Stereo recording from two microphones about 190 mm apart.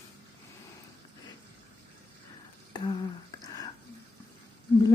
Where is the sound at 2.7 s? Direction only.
25° left (ahead or behind).